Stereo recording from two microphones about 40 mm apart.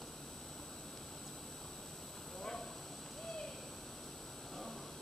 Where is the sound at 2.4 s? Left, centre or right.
Centre.